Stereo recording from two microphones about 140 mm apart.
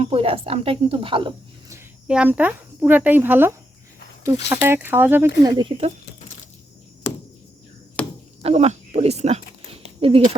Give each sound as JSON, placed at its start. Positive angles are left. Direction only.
{"t": 0.0, "sound": "speech", "side_deg": -40}
{"t": 2.0, "sound": "speech", "side_deg": -10}
{"t": 5.4, "sound": "speech", "side_deg": -25}
{"t": 5.6, "sound": "speech", "side_deg": -40}
{"t": 8.0, "sound": "chop", "side_deg": 10}
{"t": 8.4, "sound": "speech", "side_deg": -45}